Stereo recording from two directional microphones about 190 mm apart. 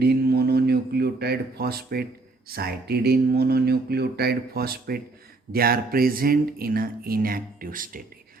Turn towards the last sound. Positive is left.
turn(degrees=-45)  # may be behind; listen again after turning